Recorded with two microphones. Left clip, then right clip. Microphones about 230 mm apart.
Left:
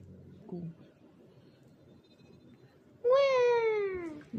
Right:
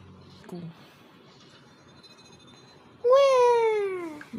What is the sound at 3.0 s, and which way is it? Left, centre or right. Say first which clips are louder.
Baby cry: right 7 dB; centre.